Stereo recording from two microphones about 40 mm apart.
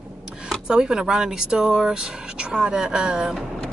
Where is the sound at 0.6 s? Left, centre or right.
Centre.